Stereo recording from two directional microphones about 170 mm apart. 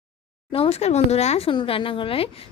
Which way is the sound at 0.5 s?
35° left (ahead or behind).